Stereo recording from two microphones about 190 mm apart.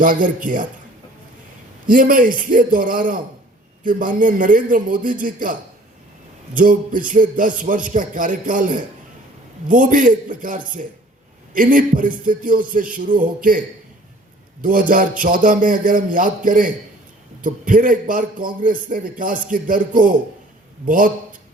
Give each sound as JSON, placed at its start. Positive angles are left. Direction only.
{"t": 0.0, "sound": "a man's voice", "side_deg": -45}
{"t": 1.9, "sound": "a man's voice", "side_deg": -45}
{"t": 14.6, "sound": "a man's voice", "side_deg": -45}